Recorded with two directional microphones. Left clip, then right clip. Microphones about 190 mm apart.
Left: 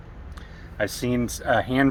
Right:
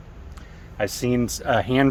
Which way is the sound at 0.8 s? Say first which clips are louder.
Right 2 dB; 40° right (ahead or behind).